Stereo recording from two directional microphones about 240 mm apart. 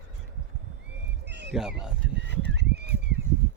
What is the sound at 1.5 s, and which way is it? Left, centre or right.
Speech, centre.